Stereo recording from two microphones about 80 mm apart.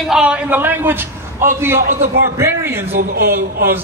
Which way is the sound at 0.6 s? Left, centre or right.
Right.